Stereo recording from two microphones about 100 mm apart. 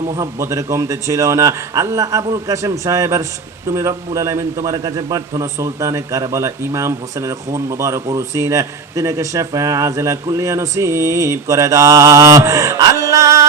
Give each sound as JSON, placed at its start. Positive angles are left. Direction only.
{"t": 0.2, "sound": "a man's voice", "side_deg": -30}
{"t": 5.4, "sound": "a man's voice", "side_deg": -35}